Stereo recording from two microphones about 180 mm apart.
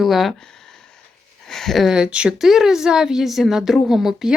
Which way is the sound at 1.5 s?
Centre (ahead or behind).